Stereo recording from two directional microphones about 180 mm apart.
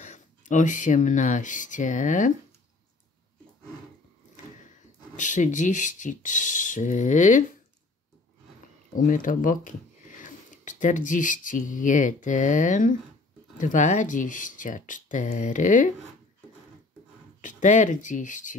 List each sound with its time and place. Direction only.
0.0 s speech: 40° left (ahead or behind)
5.1 s speech: 45° left (ahead or behind)
8.9 s speech: 45° left (ahead or behind)
17.4 s speech: 45° left (ahead or behind)